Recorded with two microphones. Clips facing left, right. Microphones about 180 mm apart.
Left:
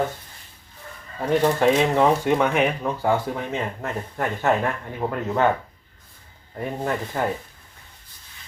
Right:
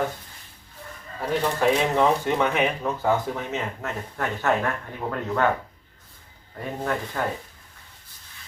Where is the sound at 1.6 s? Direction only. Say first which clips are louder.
Right 1 dB; 15° left (ahead or behind).